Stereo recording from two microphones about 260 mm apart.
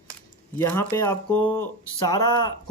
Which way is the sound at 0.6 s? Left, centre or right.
Centre.